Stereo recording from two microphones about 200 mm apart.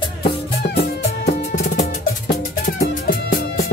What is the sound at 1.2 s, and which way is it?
Music, 35° left (ahead or behind).